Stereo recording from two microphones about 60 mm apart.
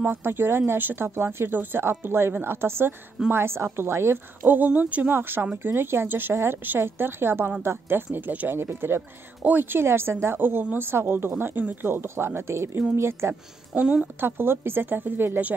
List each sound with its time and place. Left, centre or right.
0.0 s a woman's voice: right
4.5 s speech: right
5.1 s a woman's voice: right
13.7 s speech: centre
14.2 s a woman's voice: right